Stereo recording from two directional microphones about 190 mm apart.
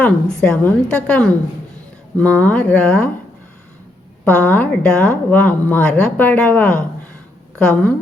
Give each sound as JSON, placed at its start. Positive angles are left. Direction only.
{"t": 0.0, "sound": "a woman's voice", "side_deg": 5}
{"t": 4.3, "sound": "a woman's voice", "side_deg": 10}